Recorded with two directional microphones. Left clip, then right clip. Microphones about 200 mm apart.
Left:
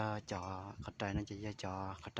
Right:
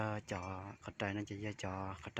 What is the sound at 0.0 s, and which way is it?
Speech, 5° right (ahead or behind).